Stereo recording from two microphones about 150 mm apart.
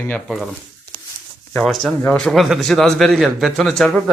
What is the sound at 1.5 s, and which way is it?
A man's voice, 5° left (ahead or behind).